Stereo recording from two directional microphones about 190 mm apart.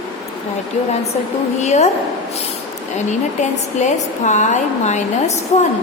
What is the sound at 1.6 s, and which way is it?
Speech, 35° left (ahead or behind).